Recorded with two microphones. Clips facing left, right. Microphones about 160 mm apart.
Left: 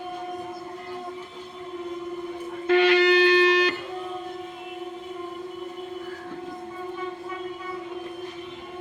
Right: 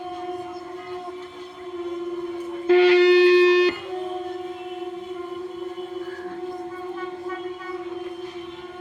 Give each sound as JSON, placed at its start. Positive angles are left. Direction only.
{"t": 2.6, "sound": "shofar", "side_deg": -35}